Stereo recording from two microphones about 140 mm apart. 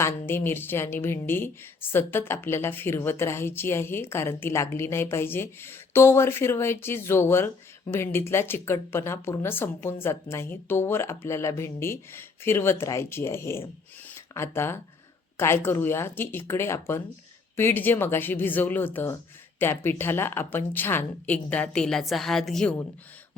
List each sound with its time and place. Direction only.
0.0 s a woman's voice: 15° left (ahead or behind)